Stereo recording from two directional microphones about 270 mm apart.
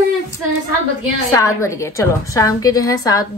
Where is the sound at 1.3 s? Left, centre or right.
Centre.